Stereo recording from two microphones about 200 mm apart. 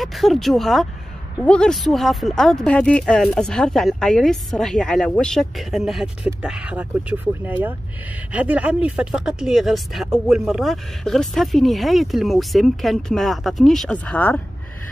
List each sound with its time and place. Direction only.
0.0 s speech: centre (ahead or behind)